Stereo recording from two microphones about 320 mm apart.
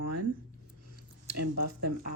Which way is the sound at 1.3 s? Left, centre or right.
Right.